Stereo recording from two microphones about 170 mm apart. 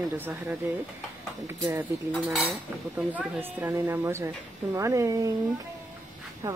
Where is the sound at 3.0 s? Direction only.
10° right (ahead or behind).